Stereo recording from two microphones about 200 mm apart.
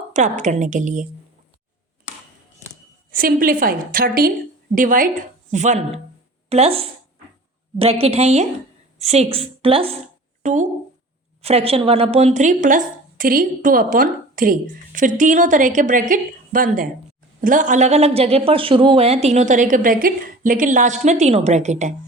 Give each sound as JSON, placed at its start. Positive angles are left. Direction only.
{"t": 0.1, "sound": "a woman's voice", "side_deg": -35}
{"t": 3.1, "sound": "a woman's voice", "side_deg": -45}
{"t": 10.4, "sound": "a woman's voice", "side_deg": -40}